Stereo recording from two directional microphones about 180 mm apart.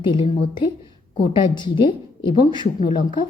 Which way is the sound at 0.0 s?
30° left (ahead or behind).